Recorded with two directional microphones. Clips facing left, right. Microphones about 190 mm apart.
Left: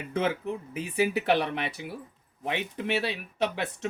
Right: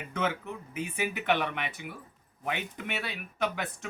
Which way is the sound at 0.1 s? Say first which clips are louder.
Left 4 dB; 35° left (ahead or behind).